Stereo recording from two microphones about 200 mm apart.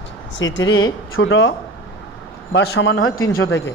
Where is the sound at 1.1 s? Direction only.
75° left (ahead or behind).